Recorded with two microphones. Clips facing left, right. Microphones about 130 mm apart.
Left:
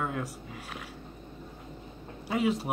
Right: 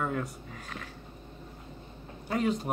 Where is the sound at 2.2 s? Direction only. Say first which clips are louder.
Left 1 dB; 5° left (ahead or behind).